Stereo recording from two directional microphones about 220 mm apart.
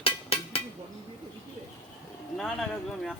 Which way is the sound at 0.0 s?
25° left (ahead or behind).